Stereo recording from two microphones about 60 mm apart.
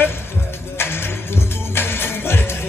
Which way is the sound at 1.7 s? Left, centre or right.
Left.